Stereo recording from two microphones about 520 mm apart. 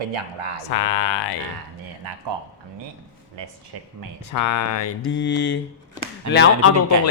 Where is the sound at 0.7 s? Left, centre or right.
Left.